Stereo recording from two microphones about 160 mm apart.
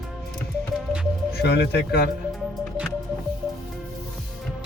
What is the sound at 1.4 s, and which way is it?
Speech, 90° left.